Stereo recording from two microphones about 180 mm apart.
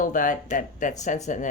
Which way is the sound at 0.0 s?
45° left (ahead or behind).